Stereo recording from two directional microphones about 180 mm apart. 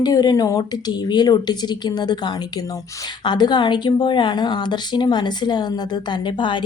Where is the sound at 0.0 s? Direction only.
20° left (ahead or behind).